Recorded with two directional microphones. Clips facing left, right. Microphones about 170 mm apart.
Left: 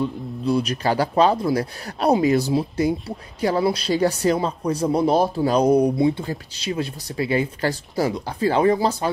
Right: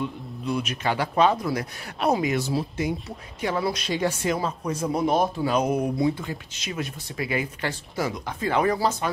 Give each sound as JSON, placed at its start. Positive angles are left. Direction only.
{"t": 0.0, "sound": "speech", "side_deg": 35}